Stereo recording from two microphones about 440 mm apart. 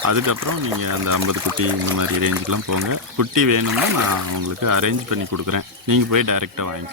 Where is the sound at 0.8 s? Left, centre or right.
Right.